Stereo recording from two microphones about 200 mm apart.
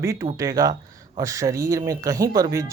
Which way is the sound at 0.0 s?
15° right (ahead or behind).